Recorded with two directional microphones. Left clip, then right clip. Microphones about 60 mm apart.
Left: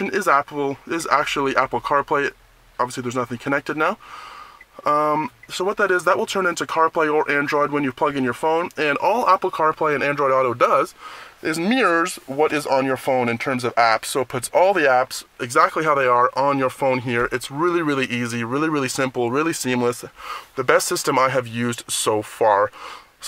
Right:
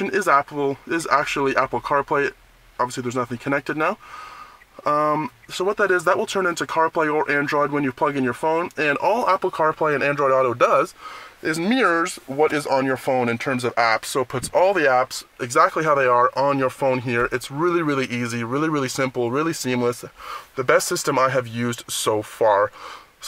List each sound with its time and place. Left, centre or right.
0.0 s speech: centre